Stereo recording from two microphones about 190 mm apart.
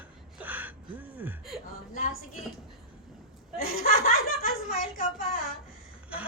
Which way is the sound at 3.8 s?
50° left (ahead or behind).